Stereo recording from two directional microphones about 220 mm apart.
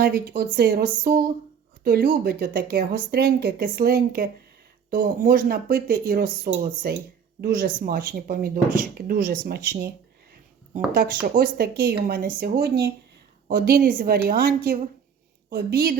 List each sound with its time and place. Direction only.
0.0 s speech: 45° right (ahead or behind)
10.9 s speech: 40° right (ahead or behind)